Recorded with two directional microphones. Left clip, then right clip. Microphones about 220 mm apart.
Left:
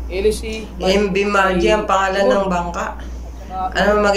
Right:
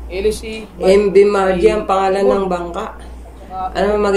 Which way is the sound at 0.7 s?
20° right (ahead or behind).